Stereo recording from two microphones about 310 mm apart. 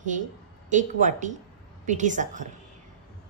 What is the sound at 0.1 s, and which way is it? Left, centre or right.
Speech, right.